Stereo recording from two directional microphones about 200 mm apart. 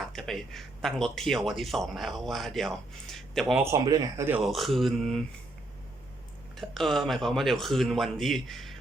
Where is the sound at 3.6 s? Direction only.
15° right (ahead or behind).